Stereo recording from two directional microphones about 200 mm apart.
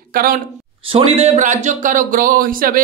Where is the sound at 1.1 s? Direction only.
35° right (ahead or behind).